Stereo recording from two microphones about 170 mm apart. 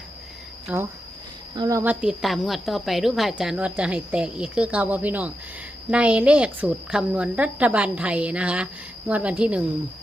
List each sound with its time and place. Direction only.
0.7 s a woman's voice: 10° right (ahead or behind)
1.5 s speech: 20° right (ahead or behind)
1.8 s a woman's voice: 10° right (ahead or behind)